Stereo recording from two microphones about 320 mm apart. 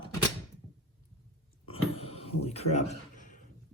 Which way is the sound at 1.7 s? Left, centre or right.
Centre.